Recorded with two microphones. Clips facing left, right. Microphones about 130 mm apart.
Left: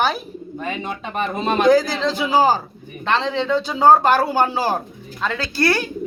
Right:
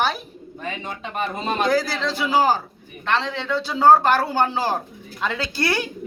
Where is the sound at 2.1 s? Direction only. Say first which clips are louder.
Left 2 dB; 20° left (ahead or behind).